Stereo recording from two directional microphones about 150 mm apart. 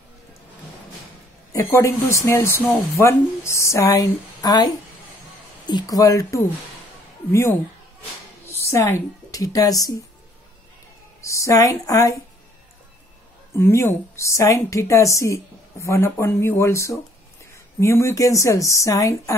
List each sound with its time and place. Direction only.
1.5 s a woman's voice: 20° left (ahead or behind)
5.7 s a woman's voice: 25° left (ahead or behind)
8.5 s a woman's voice: 20° left (ahead or behind)
11.1 s speech: 20° left (ahead or behind)
13.5 s a woman's voice: 15° left (ahead or behind)